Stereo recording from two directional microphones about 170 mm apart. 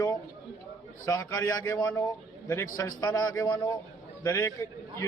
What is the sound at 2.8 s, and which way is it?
A man's voice, 20° left (ahead or behind).